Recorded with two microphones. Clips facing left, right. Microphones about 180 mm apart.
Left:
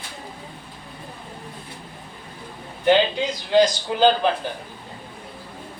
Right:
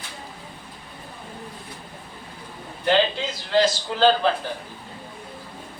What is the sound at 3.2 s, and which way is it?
Speech, 15° left (ahead or behind).